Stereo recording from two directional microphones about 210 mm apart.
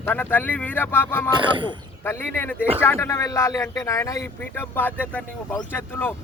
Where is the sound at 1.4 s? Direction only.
25° right (ahead or behind).